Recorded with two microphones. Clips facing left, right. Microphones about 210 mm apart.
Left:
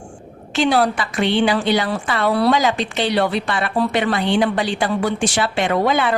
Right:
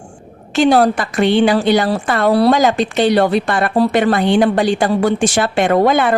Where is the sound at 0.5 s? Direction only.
45° right (ahead or behind).